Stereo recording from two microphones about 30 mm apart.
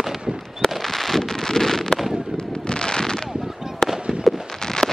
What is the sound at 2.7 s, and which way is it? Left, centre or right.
Fireworks, left.